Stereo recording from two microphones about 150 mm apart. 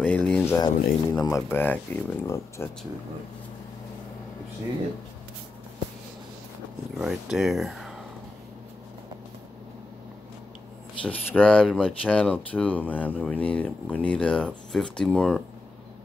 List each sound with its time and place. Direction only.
0.0 s a sound: 5° left (ahead or behind)
0.6 s speech: 25° left (ahead or behind)
1.5 s speech: 10° left (ahead or behind)
7.0 s speech: centre (ahead or behind)
11.1 s speech: 10° left (ahead or behind)